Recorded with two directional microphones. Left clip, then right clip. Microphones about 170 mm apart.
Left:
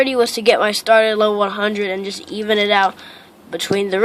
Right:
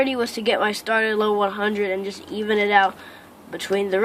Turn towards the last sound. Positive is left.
turn(degrees=40)  # may be behind; listen again after turning